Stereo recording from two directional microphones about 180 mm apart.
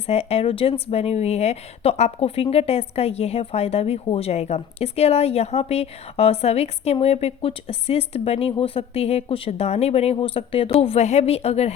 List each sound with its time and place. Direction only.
0.1 s speech: 35° left (ahead or behind)